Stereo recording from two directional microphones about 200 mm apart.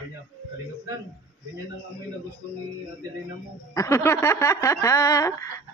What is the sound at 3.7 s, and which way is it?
Speech, 15° left (ahead or behind).